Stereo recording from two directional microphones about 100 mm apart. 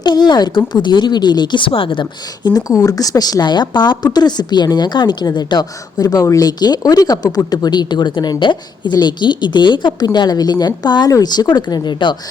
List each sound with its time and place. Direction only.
0.0 s speech: 45° left (ahead or behind)
2.5 s speech: 35° left (ahead or behind)